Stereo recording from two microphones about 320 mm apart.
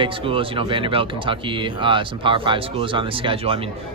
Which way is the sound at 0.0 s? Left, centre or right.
Centre.